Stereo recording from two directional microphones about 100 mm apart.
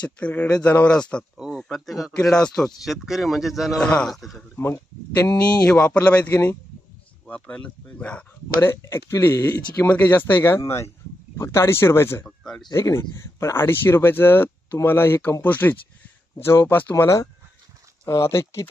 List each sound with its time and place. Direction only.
0.0 s speech: 10° left (ahead or behind)
3.8 s speech: 10° left (ahead or behind)
4.5 s speech: 25° left (ahead or behind)
5.6 s speech: 10° left (ahead or behind)
8.6 s speech: 25° left (ahead or behind)
12.2 s speech: 5° left (ahead or behind)
12.6 s speech: 35° left (ahead or behind); by 16.9 s 20° left (ahead or behind)
16.9 s speech: 30° left (ahead or behind)